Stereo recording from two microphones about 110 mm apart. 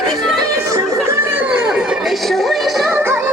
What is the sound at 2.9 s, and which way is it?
Music, 20° right (ahead or behind).